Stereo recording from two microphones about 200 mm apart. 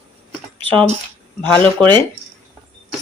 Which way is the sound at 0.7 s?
35° right (ahead or behind).